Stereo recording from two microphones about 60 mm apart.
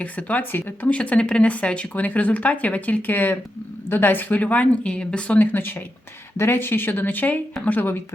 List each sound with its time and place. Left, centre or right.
0.0 s speech: left
0.9 s speech: centre
5.4 s speech: left